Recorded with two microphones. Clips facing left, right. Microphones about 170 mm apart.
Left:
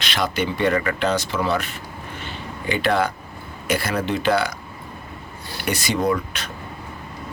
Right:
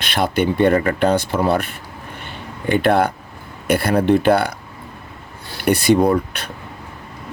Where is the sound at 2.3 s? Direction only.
55° right (ahead or behind).